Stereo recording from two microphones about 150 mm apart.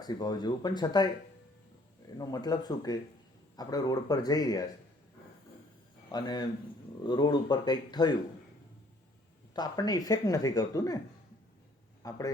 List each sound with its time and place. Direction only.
0.0 s a woman's voice: 25° left (ahead or behind)
2.1 s a woman's voice: 25° left (ahead or behind)
6.1 s a woman's voice: 30° left (ahead or behind)
9.6 s a woman's voice: 25° left (ahead or behind)
12.0 s a woman's voice: 25° left (ahead or behind)